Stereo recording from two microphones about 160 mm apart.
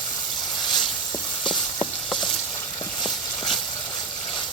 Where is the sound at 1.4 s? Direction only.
30° left (ahead or behind).